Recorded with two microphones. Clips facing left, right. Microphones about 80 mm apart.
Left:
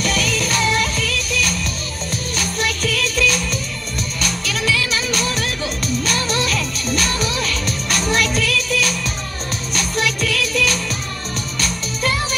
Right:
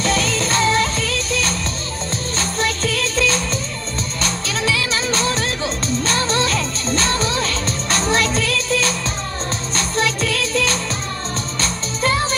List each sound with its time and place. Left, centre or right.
0.0 s music: right